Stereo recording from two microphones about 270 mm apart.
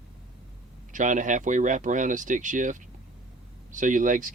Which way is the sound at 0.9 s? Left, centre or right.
Right.